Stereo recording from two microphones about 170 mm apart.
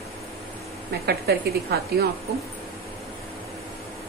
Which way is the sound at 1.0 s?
65° right (ahead or behind).